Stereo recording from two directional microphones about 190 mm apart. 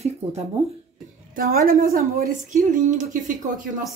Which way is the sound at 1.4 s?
50° right (ahead or behind).